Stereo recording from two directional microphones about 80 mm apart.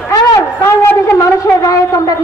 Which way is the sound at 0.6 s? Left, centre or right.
Left.